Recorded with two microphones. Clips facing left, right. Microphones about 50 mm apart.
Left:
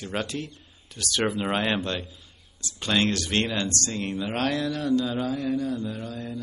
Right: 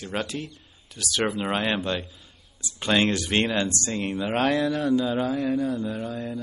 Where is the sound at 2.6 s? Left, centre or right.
Centre.